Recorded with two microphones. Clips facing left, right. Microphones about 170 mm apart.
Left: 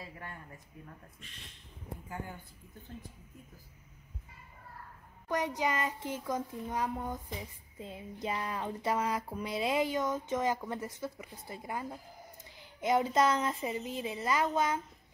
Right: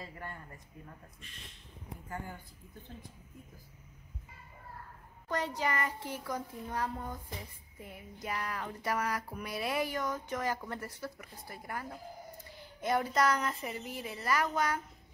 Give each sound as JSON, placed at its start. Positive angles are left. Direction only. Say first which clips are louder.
{"t": 0.0, "sound": "speech", "louder": "right 1 dB", "side_deg": 5}
{"t": 2.0, "sound": "speech", "louder": "right 1 dB", "side_deg": 5}
{"t": 5.3, "sound": "a child's voice", "louder": "left 2 dB", "side_deg": 15}
{"t": 7.3, "sound": "a sound", "louder": "left 3 dB", "side_deg": 20}